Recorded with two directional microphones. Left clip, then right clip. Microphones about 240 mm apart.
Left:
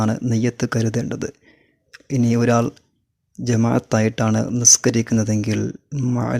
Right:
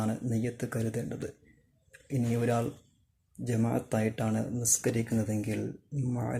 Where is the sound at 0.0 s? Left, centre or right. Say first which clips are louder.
Left 12 dB; left.